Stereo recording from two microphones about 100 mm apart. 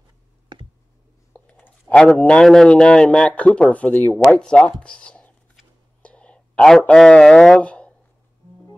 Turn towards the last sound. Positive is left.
turn(degrees=10)  # may be behind; listen again after turning